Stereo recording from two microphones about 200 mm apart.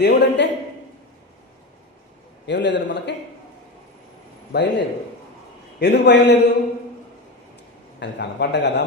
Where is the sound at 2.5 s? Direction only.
60° left (ahead or behind).